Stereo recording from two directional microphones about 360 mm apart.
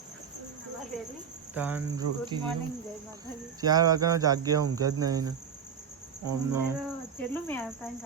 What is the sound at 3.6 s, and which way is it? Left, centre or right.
Cricket, centre.